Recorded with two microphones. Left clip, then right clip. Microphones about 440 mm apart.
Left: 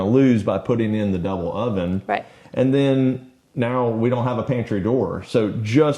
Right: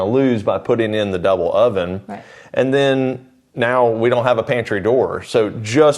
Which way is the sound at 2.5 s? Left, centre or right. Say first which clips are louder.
Right 4 dB; right.